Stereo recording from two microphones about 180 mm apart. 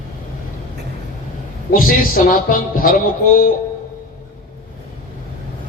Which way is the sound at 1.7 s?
50° left (ahead or behind).